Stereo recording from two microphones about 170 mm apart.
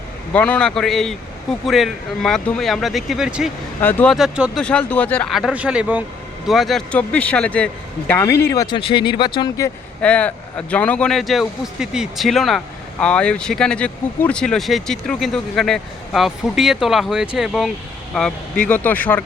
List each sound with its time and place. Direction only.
0.3 s speech: 5° left (ahead or behind)
3.8 s speech: 10° left (ahead or behind)
4.1 s speech: 5° right (ahead or behind)
4.6 s speech: 5° left (ahead or behind)
8.7 s speech: 30° left (ahead or behind)
10.0 s speech: 5° left (ahead or behind)